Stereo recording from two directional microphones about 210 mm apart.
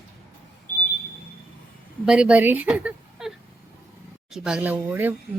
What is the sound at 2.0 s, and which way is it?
A woman's voice, 5° right (ahead or behind).